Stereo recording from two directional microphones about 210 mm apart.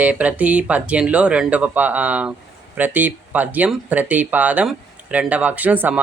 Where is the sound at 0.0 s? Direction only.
5° right (ahead or behind).